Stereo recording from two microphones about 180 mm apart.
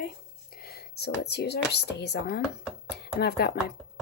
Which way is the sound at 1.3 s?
65° left (ahead or behind).